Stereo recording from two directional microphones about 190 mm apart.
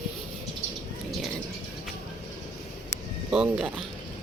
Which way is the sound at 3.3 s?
5° right (ahead or behind).